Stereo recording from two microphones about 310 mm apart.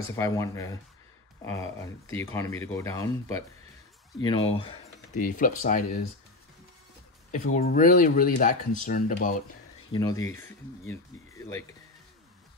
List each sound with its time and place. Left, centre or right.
0.1 s speech: centre; by 6.0 s left
7.2 s speech: left
9.9 s speech: centre